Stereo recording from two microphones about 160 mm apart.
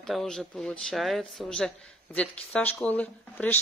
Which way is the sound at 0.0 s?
Centre (ahead or behind).